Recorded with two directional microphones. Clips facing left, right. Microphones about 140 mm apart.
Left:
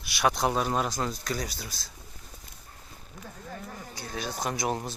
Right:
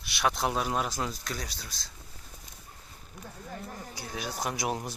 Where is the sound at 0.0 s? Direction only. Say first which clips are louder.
Left 3 dB; 5° left (ahead or behind).